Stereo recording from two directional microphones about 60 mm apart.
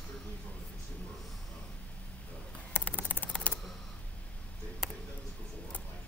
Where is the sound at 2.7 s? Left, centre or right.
Left.